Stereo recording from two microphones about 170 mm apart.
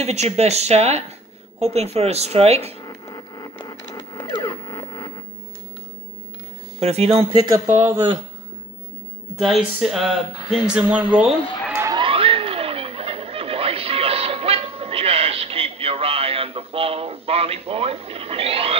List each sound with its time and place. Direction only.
0.0 s speech: 40° right (ahead or behind)
2.8 s a sound: 20° left (ahead or behind)
6.8 s speech: 35° right (ahead or behind)
7.8 s speech: 15° right (ahead or behind)
9.4 s speech: centre (ahead or behind)
11.9 s a sound: 30° right (ahead or behind)